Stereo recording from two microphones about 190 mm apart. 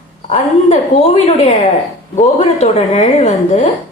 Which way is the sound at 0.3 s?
35° left (ahead or behind).